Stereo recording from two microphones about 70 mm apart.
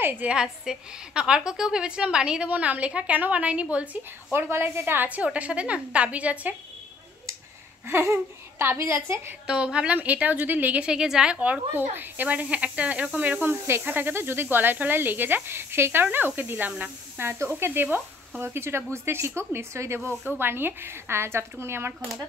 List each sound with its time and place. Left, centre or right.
0.0 s a woman's voice: right
0.3 s a woman's voice: centre
4.3 s speech: right
5.0 s speech: right
7.8 s speech: right
9.5 s a woman's voice: centre
11.7 s speech: right